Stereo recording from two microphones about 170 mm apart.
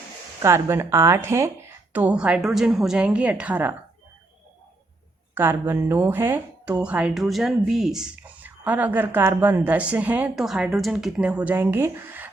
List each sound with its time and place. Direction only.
0.4 s a woman's voice: 15° right (ahead or behind)
5.3 s a woman's voice: 15° right (ahead or behind)